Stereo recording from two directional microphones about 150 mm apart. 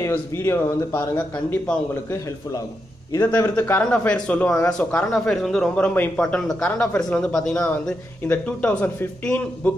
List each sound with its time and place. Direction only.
0.0 s speech: 15° left (ahead or behind)
3.1 s speech: 15° left (ahead or behind)